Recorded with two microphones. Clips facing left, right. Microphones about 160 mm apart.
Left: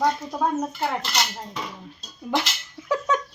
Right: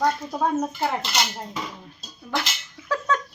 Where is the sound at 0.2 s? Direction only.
Centre (ahead or behind).